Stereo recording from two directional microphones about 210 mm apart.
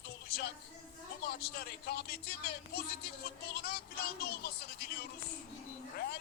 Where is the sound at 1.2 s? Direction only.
45° left (ahead or behind).